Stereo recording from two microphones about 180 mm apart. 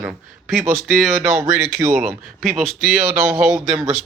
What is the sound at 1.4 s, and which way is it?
Speech, 15° right (ahead or behind).